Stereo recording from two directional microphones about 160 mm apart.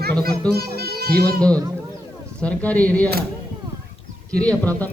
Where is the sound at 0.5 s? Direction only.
80° right.